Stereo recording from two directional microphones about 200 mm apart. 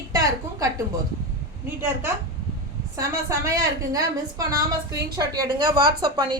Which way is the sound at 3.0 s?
15° right (ahead or behind).